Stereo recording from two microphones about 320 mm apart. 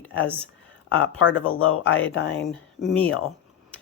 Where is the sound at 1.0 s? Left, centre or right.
Left.